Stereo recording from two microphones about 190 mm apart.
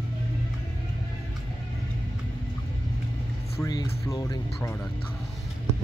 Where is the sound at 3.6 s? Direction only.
20° left (ahead or behind).